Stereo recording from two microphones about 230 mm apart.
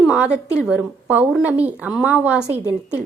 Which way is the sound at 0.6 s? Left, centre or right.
Centre.